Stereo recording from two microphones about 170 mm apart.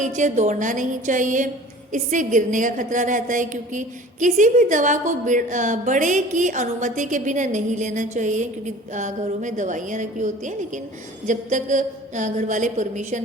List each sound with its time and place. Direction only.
0.0 s a woman's voice: 45° right (ahead or behind)